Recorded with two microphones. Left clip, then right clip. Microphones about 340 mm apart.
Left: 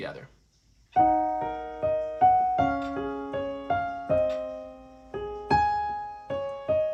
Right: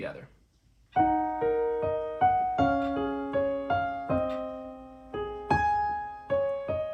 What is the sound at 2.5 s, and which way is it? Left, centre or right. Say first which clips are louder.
Music: even; centre.